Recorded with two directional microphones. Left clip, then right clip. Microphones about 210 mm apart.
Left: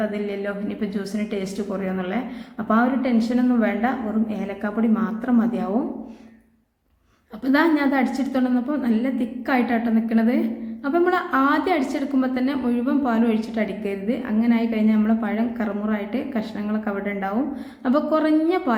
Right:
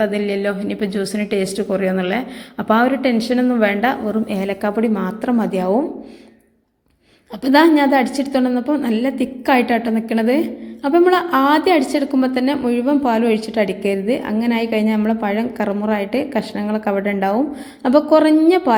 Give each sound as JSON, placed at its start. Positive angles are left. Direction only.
{"t": 0.0, "sound": "a woman's voice", "side_deg": -30}
{"t": 7.4, "sound": "a woman's voice", "side_deg": -30}